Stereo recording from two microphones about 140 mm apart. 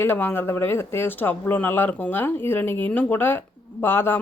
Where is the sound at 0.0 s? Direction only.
15° left (ahead or behind).